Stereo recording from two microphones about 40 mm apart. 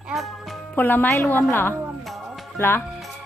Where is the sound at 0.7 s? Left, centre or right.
Left.